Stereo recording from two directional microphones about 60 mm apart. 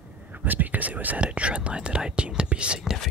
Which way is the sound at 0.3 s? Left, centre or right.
Right.